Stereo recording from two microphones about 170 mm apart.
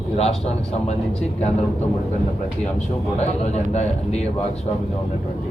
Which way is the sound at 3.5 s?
40° left (ahead or behind).